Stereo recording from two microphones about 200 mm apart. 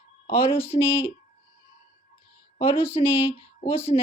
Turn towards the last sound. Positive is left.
turn(degrees=30)  # may be behind; listen again after turning